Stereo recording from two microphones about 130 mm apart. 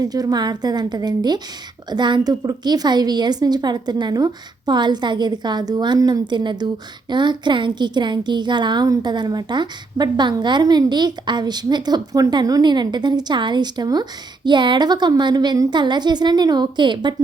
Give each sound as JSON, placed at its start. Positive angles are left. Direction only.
{"t": 0.0, "sound": "a woman's voice", "side_deg": -30}